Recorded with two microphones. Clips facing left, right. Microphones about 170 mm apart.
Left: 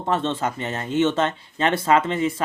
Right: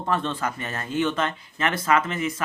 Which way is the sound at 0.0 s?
25° left (ahead or behind).